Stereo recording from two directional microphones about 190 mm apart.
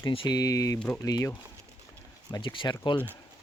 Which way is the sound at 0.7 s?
5° left (ahead or behind).